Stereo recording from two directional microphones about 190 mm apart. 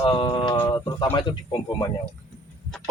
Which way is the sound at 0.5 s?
10° left (ahead or behind).